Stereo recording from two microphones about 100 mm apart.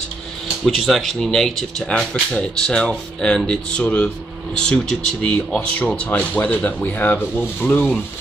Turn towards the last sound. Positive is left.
turn(degrees=10)  # may be behind; listen again after turning